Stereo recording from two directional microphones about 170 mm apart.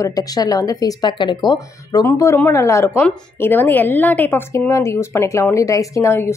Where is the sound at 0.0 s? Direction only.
20° left (ahead or behind).